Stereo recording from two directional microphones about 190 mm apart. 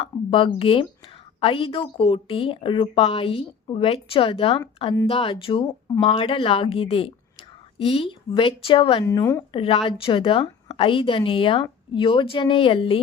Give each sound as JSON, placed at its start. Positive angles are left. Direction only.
{"t": 0.0, "sound": "a woman's voice", "side_deg": 30}
{"t": 9.0, "sound": "speech", "side_deg": 15}
{"t": 9.5, "sound": "a woman's voice", "side_deg": 30}